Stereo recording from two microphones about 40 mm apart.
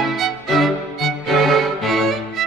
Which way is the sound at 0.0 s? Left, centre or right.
Centre.